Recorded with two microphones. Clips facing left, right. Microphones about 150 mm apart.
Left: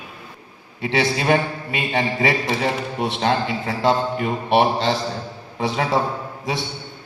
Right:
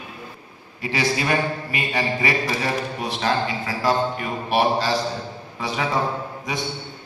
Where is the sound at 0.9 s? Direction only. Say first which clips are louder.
Left 3 dB; 25° left (ahead or behind).